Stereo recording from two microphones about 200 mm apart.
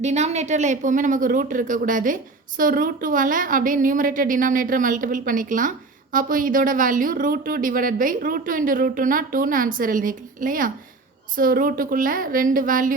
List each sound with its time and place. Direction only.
0.0 s speech: 35° right (ahead or behind)